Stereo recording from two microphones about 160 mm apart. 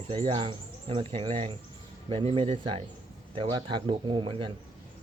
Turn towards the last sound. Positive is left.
turn(degrees=-30)  # may be behind; listen again after turning